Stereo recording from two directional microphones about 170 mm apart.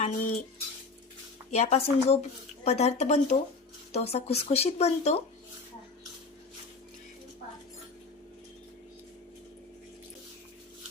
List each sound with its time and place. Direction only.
0.0 s speech: 40° left (ahead or behind)
1.5 s speech: 40° left (ahead or behind)